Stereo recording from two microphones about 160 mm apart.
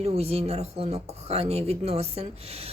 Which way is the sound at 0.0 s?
40° right (ahead or behind).